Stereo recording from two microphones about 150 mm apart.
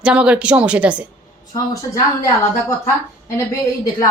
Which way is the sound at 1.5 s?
20° left (ahead or behind).